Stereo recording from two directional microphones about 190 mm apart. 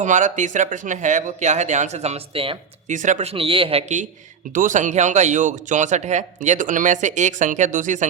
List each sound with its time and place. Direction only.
0.0 s speech: 40° right (ahead or behind)